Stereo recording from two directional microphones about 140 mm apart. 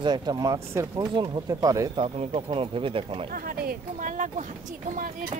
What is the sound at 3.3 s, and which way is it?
Speech, 90° right.